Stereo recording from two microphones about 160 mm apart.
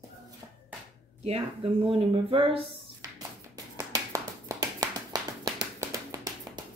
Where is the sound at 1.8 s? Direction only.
35° right (ahead or behind).